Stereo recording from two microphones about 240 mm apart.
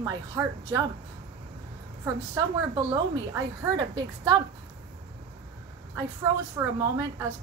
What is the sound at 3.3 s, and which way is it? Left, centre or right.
A woman's voice, centre.